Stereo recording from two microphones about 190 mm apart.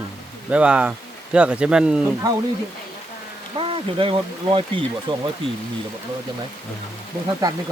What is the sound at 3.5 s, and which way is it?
Speech, 30° right (ahead or behind).